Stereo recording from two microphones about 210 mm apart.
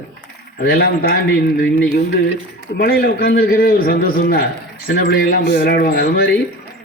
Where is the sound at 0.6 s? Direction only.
45° left (ahead or behind).